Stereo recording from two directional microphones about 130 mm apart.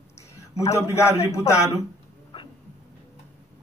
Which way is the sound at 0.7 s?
20° left (ahead or behind).